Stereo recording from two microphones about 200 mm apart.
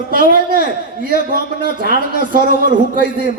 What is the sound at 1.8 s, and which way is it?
Speech, 45° right (ahead or behind).